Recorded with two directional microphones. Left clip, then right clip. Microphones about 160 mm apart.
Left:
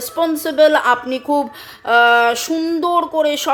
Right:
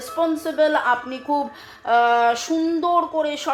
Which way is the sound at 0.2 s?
55° left (ahead or behind).